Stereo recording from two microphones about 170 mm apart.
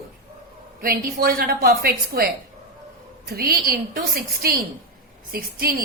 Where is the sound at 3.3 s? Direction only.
65° right (ahead or behind).